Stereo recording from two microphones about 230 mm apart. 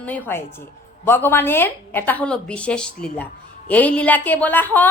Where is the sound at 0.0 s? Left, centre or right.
Centre.